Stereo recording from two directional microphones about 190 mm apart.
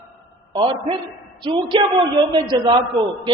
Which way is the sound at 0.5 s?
30° right (ahead or behind).